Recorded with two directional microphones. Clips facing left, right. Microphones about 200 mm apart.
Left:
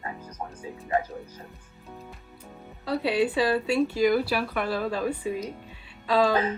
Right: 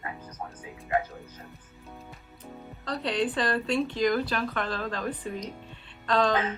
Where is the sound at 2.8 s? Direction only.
5° left (ahead or behind).